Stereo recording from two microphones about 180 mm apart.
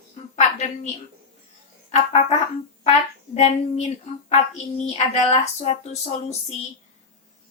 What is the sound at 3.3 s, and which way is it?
A woman's voice, 40° left (ahead or behind).